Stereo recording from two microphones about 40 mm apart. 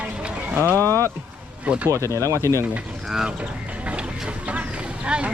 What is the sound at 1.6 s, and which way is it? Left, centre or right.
Speech, right.